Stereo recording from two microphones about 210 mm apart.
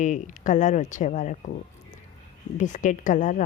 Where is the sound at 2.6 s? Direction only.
35° left (ahead or behind).